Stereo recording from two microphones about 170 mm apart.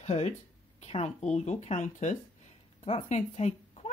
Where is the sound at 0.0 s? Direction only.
40° left (ahead or behind).